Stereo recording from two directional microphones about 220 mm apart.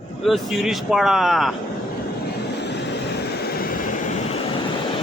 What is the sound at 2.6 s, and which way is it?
Vehicle, 50° left (ahead or behind).